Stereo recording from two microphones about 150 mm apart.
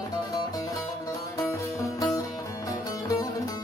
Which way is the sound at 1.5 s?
20° left (ahead or behind).